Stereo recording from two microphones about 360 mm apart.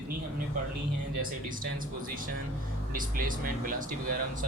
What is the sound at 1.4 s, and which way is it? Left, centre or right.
Speech, right.